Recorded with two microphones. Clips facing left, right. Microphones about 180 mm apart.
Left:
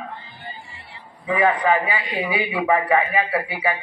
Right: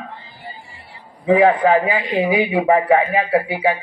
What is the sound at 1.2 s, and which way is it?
A man's voice, 55° right (ahead or behind).